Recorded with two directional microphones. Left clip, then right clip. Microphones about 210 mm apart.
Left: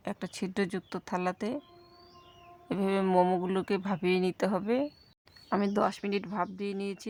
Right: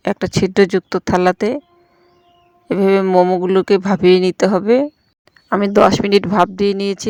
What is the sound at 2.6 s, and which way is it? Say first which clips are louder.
Speech: right 16 dB; 35° right (ahead or behind).